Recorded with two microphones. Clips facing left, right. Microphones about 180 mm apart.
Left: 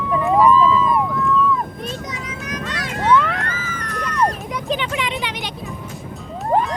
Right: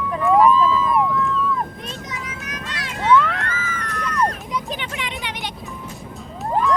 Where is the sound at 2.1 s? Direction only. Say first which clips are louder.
Left 3 dB; 35° left (ahead or behind).